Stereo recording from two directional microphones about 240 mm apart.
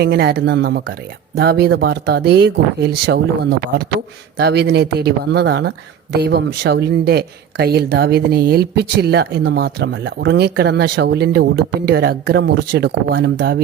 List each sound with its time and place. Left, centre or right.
0.0 s speech: right